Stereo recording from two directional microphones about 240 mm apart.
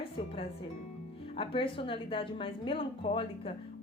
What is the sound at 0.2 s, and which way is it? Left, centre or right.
Music, left.